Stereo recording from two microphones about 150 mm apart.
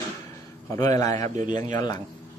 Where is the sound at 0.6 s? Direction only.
20° left (ahead or behind).